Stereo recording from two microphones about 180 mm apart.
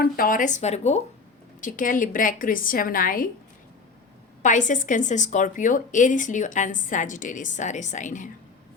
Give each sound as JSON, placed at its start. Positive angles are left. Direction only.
{"t": 0.0, "sound": "a woman's voice", "side_deg": 50}
{"t": 4.4, "sound": "a woman's voice", "side_deg": 45}